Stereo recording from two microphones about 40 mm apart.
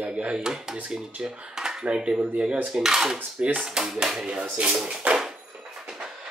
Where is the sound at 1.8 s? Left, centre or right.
Right.